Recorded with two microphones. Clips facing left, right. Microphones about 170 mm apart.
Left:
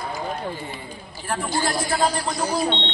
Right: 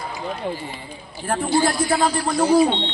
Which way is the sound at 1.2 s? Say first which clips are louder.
Right 4 dB; 35° right (ahead or behind).